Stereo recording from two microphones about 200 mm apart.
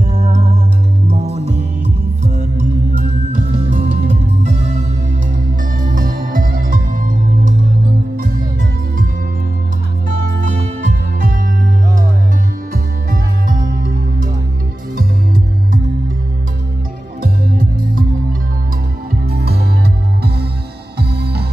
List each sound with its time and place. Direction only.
1.1 s music: 35° right (ahead or behind)
5.8 s music: 45° right (ahead or behind)
17.2 s music: 45° right (ahead or behind)
19.2 s music: 50° right (ahead or behind)
21.0 s music: 55° right (ahead or behind)